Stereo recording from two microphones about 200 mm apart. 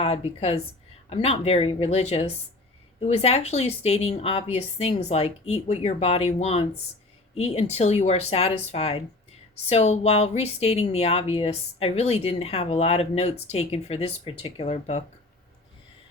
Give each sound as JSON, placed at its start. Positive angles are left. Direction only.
{"t": 0.0, "sound": "speech", "side_deg": 30}